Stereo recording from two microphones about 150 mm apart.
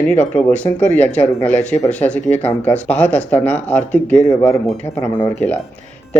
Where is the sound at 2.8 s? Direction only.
10° left (ahead or behind).